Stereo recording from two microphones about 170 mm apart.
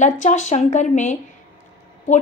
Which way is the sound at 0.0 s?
45° left (ahead or behind).